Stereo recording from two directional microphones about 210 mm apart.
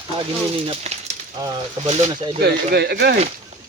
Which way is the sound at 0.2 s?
25° right (ahead or behind).